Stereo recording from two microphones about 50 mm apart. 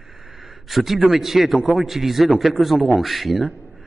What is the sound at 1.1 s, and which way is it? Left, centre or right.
A man's voice, centre.